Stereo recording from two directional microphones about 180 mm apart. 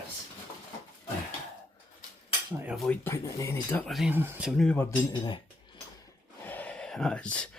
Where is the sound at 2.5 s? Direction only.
15° right (ahead or behind).